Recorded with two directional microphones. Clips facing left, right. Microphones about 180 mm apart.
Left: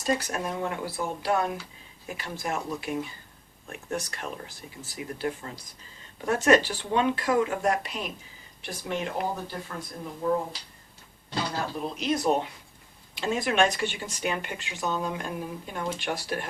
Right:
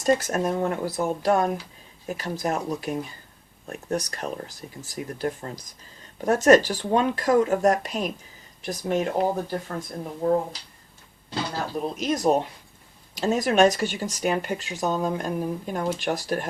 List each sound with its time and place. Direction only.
0.0 s speech: 45° right (ahead or behind)
11.9 s speech: 40° right (ahead or behind)